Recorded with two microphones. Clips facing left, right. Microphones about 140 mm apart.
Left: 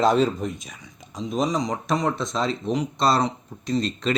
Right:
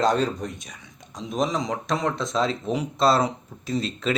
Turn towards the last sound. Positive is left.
turn(degrees=0)  # may be behind; listen again after turning